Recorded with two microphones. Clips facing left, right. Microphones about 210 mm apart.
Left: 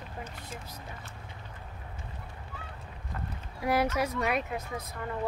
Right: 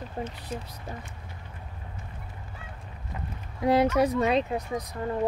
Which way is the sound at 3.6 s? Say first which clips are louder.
Right 6 dB; 20° right (ahead or behind).